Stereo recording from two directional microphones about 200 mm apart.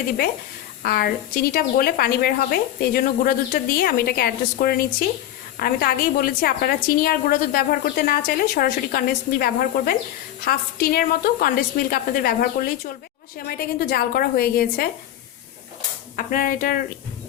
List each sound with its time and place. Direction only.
0.8 s a woman's voice: 50° left (ahead or behind)
16.1 s a woman's voice: 45° left (ahead or behind)